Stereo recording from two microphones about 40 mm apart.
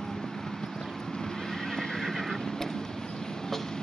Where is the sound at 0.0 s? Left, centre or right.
Centre.